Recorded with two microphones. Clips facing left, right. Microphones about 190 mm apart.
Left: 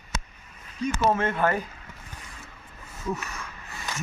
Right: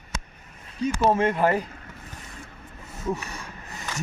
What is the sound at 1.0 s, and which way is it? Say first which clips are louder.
Speech: right 3 dB; 30° right (ahead or behind).